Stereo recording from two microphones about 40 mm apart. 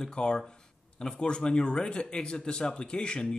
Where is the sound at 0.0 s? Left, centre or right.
Left.